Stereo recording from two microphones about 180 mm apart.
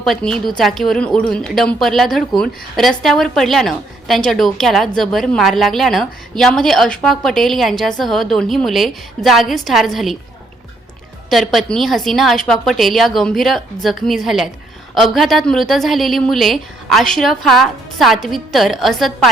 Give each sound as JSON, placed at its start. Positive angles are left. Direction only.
{"t": 0.0, "sound": "a woman's voice", "side_deg": 0}
{"t": 11.3, "sound": "a woman's voice", "side_deg": 0}